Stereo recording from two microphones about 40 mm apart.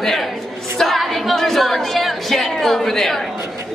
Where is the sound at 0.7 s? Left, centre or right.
Centre.